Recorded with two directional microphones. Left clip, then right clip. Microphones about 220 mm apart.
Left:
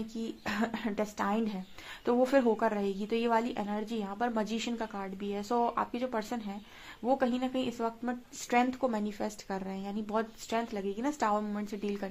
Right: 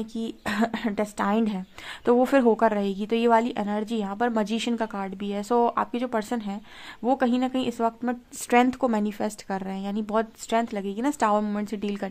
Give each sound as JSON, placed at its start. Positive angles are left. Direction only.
{"t": 0.0, "sound": "a woman's voice", "side_deg": -45}